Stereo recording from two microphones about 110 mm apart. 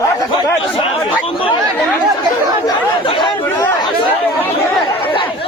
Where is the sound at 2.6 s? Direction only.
45° left (ahead or behind).